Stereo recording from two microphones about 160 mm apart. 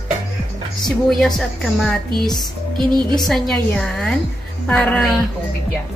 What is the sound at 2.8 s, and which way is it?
Speech, 25° right (ahead or behind).